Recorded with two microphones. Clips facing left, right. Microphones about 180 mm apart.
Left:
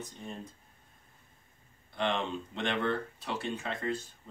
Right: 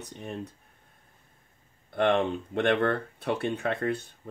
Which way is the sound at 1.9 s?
55° right (ahead or behind).